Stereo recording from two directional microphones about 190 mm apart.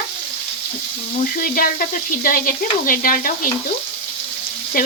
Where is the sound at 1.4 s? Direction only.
50° left (ahead or behind).